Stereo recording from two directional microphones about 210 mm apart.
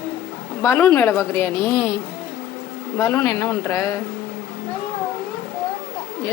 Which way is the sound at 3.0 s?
15° left (ahead or behind).